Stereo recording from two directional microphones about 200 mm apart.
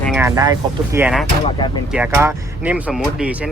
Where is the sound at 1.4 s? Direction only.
25° left (ahead or behind).